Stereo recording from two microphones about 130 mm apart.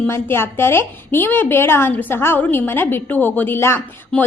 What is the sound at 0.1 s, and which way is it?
A woman's voice, 20° left (ahead or behind).